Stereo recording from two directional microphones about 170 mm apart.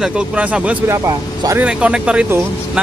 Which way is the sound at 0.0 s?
5° right (ahead or behind).